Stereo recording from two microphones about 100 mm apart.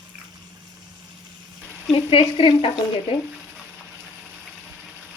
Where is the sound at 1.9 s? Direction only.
65° left (ahead or behind).